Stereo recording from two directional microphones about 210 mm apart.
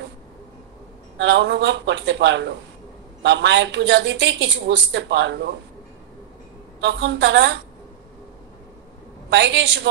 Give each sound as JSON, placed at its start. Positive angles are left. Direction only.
{"t": 1.1, "sound": "a woman's voice", "side_deg": -60}
{"t": 6.8, "sound": "a woman's voice", "side_deg": -60}
{"t": 9.3, "sound": "a woman's voice", "side_deg": -60}